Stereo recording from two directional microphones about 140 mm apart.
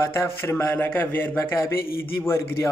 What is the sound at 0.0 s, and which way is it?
A man's voice, 20° left (ahead or behind).